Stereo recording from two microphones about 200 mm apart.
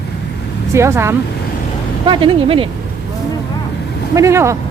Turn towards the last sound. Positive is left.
turn(degrees=-15)  # may be behind; listen again after turning